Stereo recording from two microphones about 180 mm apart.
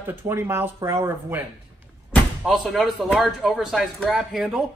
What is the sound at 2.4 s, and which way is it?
A man's voice, centre (ahead or behind).